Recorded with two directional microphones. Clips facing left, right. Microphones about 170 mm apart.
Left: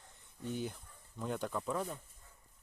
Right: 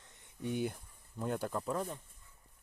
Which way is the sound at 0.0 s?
65° right (ahead or behind).